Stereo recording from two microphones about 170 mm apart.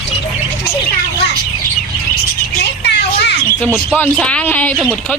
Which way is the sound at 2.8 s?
85° left.